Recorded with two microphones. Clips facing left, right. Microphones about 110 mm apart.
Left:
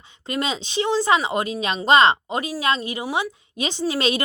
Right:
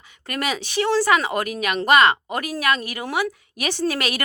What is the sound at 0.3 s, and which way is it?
A woman's voice, 20° left (ahead or behind).